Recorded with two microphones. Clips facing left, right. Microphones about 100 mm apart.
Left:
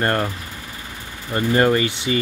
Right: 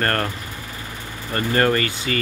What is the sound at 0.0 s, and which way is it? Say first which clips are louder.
Speech: left 2 dB; 10° left (ahead or behind).